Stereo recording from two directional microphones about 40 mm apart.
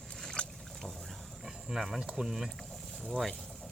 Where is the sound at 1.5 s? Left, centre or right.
Centre.